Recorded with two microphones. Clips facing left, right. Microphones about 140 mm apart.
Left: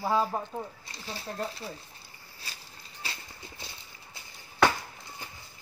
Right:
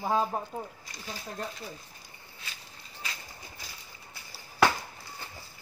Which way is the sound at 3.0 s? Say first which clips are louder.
Even; 30° left (ahead or behind).